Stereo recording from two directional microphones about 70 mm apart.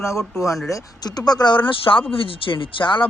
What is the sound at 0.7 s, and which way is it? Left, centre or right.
Speech, left.